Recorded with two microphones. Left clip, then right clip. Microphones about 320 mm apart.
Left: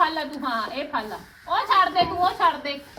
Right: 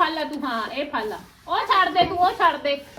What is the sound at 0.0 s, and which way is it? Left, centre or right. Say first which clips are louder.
Speech: even; left.